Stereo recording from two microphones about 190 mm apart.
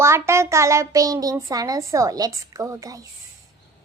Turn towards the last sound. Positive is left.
turn(degrees=-15)  # may be behind; listen again after turning